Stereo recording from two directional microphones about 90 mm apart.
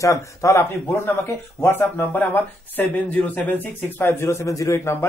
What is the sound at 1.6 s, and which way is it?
Speech, 25° left (ahead or behind).